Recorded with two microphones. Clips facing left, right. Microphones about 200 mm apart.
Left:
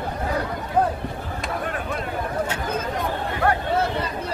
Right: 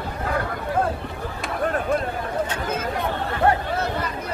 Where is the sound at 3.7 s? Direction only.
30° left (ahead or behind).